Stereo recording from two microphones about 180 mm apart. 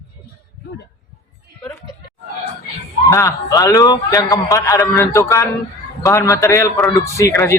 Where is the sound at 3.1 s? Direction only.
15° left (ahead or behind).